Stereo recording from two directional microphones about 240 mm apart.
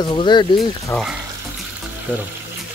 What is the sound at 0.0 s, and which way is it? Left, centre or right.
Speech, centre.